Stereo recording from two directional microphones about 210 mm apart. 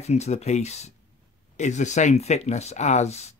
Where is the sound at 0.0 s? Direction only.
30° left (ahead or behind).